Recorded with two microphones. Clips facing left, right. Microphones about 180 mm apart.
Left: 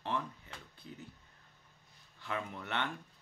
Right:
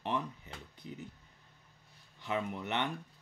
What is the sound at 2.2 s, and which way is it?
Speech, 20° right (ahead or behind).